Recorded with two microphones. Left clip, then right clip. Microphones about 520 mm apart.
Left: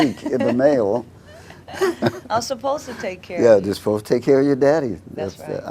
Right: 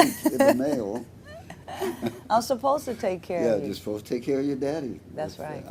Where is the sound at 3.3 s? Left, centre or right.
Left.